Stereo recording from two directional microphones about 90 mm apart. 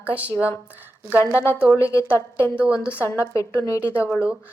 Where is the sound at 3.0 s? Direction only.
20° left (ahead or behind).